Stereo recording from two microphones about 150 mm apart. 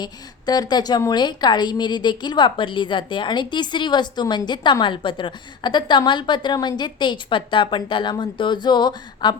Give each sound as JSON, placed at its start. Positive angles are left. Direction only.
{"t": 0.0, "sound": "a woman's voice", "side_deg": 25}